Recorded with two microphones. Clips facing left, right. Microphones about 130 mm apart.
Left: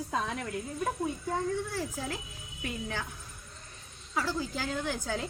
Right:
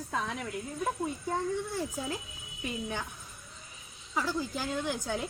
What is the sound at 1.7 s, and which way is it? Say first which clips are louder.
A woman's voice: right 1 dB; 20° right (ahead or behind).